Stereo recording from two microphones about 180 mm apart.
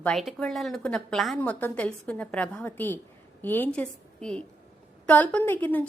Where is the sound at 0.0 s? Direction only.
Centre (ahead or behind).